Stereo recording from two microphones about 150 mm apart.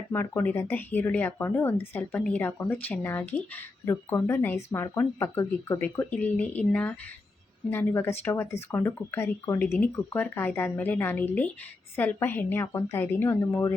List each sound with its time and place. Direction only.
0.1 s speech: 15° left (ahead or behind)
5.8 s speech: 10° left (ahead or behind)